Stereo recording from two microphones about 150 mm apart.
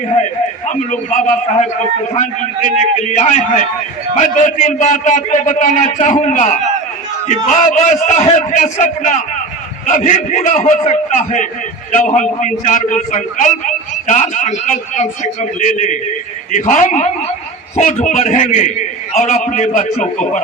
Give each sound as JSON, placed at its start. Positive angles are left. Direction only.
{"t": 0.7, "sound": "a man's voice", "side_deg": 50}
{"t": 3.0, "sound": "a man's voice", "side_deg": 50}